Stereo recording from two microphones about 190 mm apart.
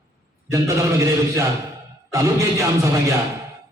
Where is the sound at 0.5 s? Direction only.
15° right (ahead or behind).